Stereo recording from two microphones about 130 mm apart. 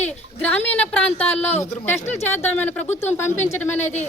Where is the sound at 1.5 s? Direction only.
60° left (ahead or behind).